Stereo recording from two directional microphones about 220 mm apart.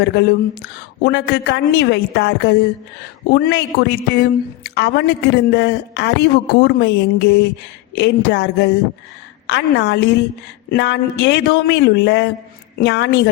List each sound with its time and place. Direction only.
0.0 s a man's voice: 45° left (ahead or behind)